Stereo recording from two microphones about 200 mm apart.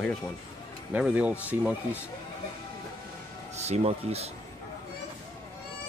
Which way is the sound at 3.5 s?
35° right (ahead or behind).